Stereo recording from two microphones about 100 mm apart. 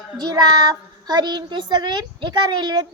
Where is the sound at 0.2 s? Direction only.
45° right (ahead or behind).